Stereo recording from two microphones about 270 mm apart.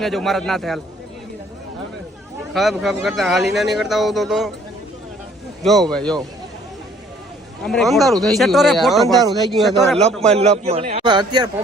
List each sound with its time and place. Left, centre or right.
0.0 s speech: centre
2.5 s speech: centre
5.9 s speech: centre
7.6 s speech: centre
10.3 s a man's voice: right